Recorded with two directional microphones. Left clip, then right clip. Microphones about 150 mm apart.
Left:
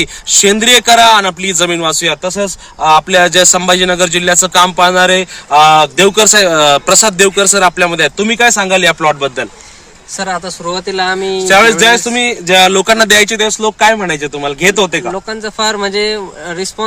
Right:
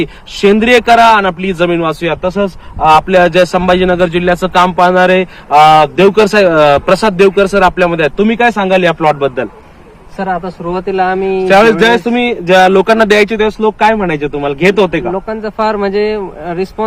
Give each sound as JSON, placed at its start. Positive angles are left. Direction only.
{"t": 0.0, "sound": "speech", "side_deg": 25}
{"t": 10.8, "sound": "speech", "side_deg": -10}
{"t": 11.3, "sound": "speech", "side_deg": 35}
{"t": 15.5, "sound": "speech", "side_deg": -15}